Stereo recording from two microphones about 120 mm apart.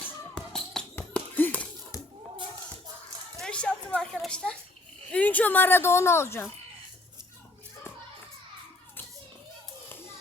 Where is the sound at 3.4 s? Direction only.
10° left (ahead or behind).